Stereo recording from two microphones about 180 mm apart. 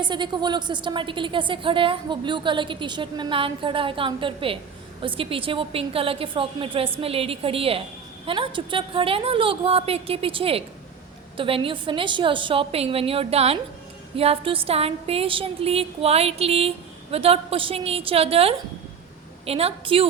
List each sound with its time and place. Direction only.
0.0 s a woman's voice: 25° right (ahead or behind)